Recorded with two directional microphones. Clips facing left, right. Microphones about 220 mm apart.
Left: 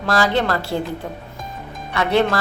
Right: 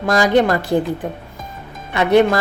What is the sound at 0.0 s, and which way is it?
Speech, 15° right (ahead or behind).